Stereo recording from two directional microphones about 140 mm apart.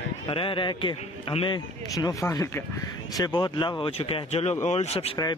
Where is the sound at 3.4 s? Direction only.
35° left (ahead or behind).